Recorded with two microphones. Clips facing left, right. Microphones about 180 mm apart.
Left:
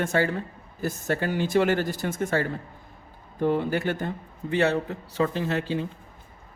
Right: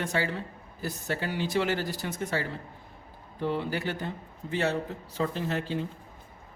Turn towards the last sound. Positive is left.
turn(degrees=75)  # may be behind; listen again after turning